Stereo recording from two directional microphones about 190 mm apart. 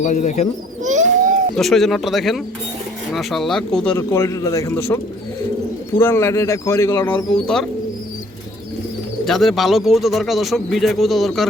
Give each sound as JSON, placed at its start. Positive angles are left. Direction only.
{"t": 0.0, "sound": "speech", "side_deg": 40}
{"t": 0.8, "sound": "a sound", "side_deg": -40}
{"t": 1.5, "sound": "speech", "side_deg": 0}
{"t": 3.9, "sound": "speech", "side_deg": 15}
{"t": 6.0, "sound": "speech", "side_deg": 10}
{"t": 7.4, "sound": "speech", "side_deg": 0}
{"t": 9.2, "sound": "speech", "side_deg": 0}